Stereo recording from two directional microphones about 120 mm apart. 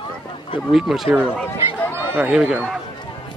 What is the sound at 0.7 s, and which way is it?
Speech, 5° right (ahead or behind).